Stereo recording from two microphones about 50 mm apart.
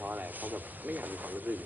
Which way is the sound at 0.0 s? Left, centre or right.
Right.